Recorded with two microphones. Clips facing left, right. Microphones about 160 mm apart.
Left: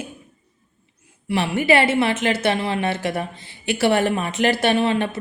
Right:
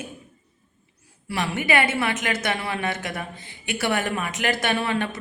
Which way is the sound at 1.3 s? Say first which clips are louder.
Left 5 dB; 30° left (ahead or behind).